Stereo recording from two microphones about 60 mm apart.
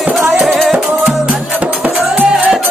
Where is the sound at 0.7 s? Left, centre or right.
Centre.